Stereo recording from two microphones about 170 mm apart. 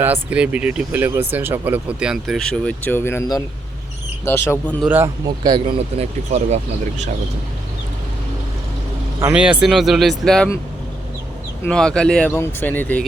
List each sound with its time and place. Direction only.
0.0 s speech: 10° right (ahead or behind); by 4.7 s 15° left (ahead or behind)
4.9 s speech: 10° right (ahead or behind)
5.4 s speech: 25° right (ahead or behind)
9.3 s speech: 5° right (ahead or behind)
11.6 s speech: 5° left (ahead or behind)